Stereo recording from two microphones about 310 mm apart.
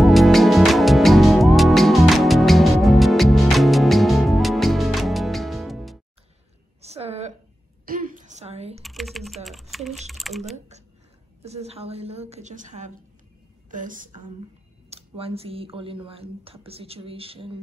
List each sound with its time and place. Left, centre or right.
0.0 s music: centre
6.8 s a sound: centre
8.8 s typing: centre
11.4 s a woman's voice: centre